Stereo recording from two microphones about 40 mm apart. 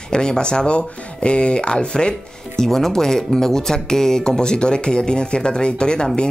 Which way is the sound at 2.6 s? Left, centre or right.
Centre.